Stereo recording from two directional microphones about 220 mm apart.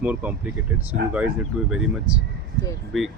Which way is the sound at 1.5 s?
5° right (ahead or behind).